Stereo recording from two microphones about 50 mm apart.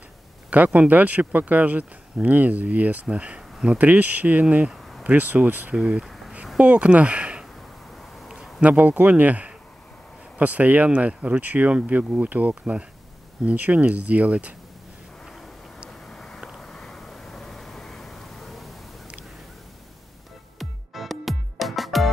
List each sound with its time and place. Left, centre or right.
0.7 s speech: right
3.7 s speech: right
5.8 s speech: centre
6.0 s a sound: centre
6.6 s speech: right
8.3 s a sound: centre
8.6 s speech: right
16.1 s vehicle: centre
16.4 s a sound: centre
20.5 s music: centre